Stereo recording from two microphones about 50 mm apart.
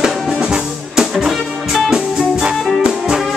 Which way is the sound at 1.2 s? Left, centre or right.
Centre.